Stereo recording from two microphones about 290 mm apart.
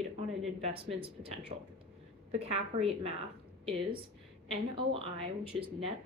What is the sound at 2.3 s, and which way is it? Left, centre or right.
A woman's voice, right.